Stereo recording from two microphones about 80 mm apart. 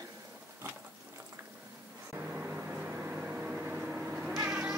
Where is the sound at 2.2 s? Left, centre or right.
Centre.